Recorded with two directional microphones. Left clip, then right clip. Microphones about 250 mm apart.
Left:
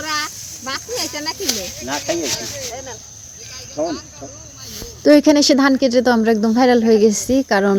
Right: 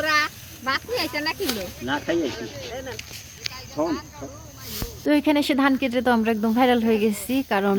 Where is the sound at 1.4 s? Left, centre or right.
Right.